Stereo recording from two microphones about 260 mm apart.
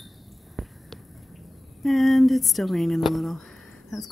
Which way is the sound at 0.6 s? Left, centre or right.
Centre.